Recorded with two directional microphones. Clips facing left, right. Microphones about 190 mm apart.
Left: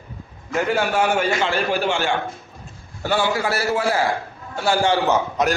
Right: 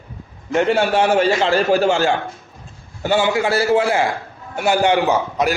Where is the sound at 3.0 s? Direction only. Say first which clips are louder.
Right 4 dB; 20° right (ahead or behind).